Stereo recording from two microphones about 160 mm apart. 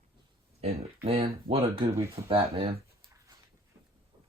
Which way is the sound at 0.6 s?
35° right (ahead or behind).